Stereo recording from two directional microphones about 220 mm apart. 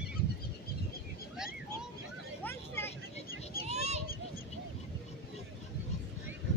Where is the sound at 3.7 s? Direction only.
30° right (ahead or behind).